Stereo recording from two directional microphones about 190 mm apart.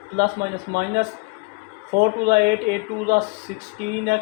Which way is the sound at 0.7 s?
55° right (ahead or behind).